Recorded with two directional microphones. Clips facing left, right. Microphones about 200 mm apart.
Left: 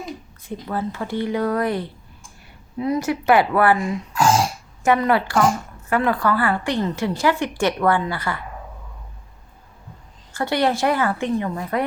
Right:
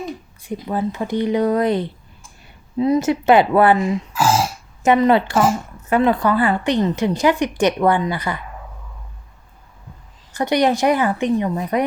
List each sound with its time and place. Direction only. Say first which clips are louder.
0.4 s a woman's voice: right 4 dB; 15° right (ahead or behind)
3.9 s throat clearing: even; 5° right (ahead or behind)
4.8 s a woman's voice: right 4 dB; 20° right (ahead or behind)
10.3 s speech: right 3 dB; 20° right (ahead or behind)